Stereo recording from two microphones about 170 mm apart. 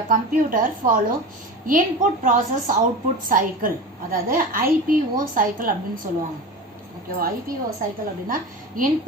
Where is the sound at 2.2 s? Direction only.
50° right (ahead or behind).